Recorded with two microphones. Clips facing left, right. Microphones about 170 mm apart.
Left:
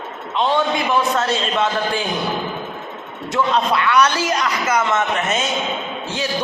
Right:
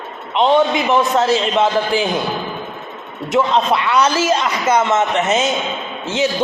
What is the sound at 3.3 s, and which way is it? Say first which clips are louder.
A man's voice: right 3 dB; 20° right (ahead or behind).